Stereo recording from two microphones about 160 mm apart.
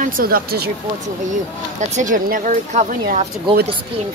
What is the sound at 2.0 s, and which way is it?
A woman's voice, 55° right (ahead or behind).